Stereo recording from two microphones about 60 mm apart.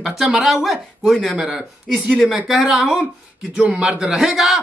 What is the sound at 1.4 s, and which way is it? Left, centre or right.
A man's voice, centre.